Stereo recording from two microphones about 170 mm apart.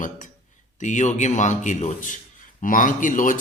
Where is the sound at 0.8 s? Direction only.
45° left (ahead or behind).